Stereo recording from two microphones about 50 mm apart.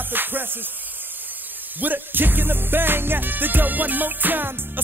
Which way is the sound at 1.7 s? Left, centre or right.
Right.